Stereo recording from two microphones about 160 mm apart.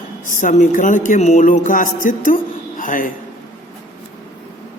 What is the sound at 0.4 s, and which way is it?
A man's voice, 55° left (ahead or behind).